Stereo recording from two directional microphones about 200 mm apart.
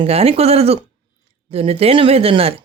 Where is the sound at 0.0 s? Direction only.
30° right (ahead or behind).